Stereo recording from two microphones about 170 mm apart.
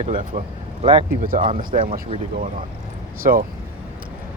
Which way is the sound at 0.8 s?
30° right (ahead or behind).